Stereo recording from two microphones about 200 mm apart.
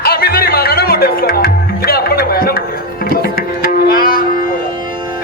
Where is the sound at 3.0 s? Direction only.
50° left (ahead or behind).